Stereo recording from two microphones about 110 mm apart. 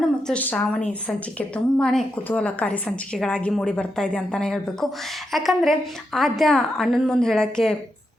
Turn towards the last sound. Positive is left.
turn(degrees=5)  # may be behind; listen again after turning